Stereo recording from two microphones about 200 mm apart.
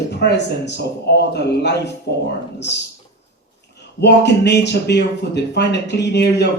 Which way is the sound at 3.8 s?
60° left (ahead or behind).